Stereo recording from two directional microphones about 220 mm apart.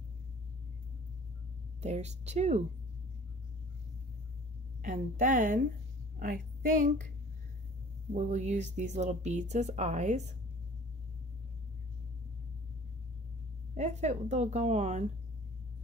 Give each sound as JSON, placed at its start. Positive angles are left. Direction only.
{"t": 1.8, "sound": "speech", "side_deg": -30}
{"t": 4.8, "sound": "a woman's voice", "side_deg": -35}
{"t": 8.1, "sound": "speech", "side_deg": -35}
{"t": 13.7, "sound": "speech", "side_deg": -30}